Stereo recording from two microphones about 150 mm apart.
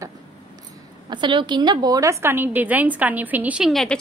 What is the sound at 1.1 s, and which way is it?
A woman's voice, 30° right (ahead or behind).